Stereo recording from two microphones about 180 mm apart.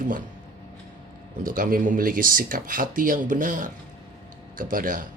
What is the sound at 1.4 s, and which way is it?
Speech, 50° right (ahead or behind).